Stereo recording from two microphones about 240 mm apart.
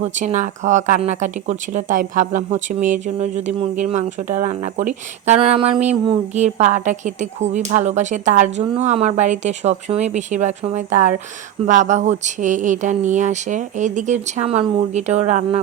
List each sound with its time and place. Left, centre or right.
0.0 s speech: right